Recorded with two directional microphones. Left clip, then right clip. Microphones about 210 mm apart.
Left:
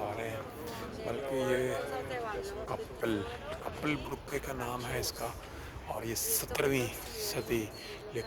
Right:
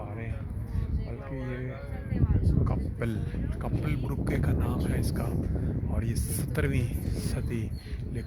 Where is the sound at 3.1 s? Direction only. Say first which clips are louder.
Left 3 dB; 10° left (ahead or behind).